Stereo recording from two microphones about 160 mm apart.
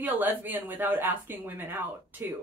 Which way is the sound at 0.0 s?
10° right (ahead or behind).